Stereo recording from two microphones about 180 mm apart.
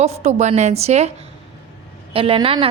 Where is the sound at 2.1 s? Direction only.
30° right (ahead or behind).